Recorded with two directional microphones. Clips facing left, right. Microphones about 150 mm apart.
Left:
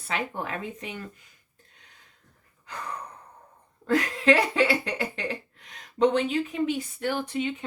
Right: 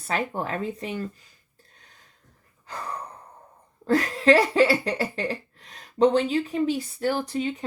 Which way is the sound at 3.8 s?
35° right (ahead or behind).